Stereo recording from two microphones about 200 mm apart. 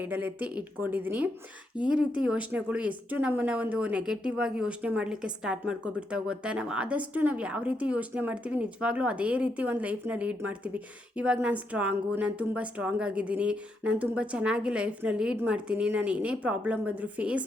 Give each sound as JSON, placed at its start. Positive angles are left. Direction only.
{"t": 0.0, "sound": "speech", "side_deg": -10}